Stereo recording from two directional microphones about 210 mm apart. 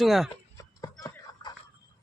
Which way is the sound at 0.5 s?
15° left (ahead or behind).